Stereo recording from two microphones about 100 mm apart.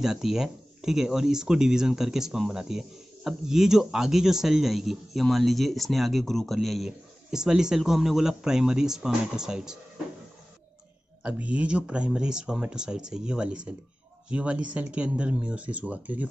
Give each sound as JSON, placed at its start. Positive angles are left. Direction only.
{"t": 0.0, "sound": "a man's voice", "side_deg": -5}
{"t": 11.2, "sound": "speech", "side_deg": -15}